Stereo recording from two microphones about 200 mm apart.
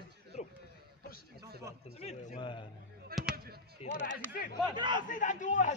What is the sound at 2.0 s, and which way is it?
Speech, 30° left (ahead or behind).